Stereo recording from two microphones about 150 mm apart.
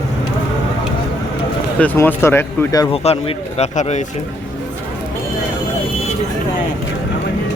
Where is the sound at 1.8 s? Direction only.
15° left (ahead or behind).